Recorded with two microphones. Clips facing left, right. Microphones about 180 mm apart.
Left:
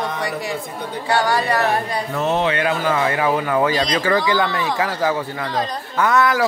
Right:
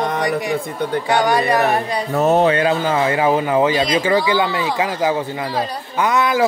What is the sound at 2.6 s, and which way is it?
Speech, 25° right (ahead or behind).